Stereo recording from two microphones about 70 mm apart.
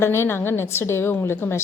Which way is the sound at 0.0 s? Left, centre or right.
Left.